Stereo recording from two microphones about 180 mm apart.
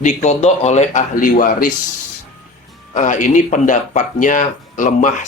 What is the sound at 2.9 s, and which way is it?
Speech, 45° left (ahead or behind).